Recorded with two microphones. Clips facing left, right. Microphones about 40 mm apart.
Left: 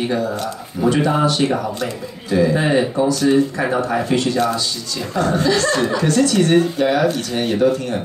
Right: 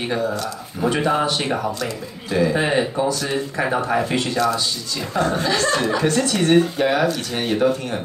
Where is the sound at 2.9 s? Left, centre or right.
Right.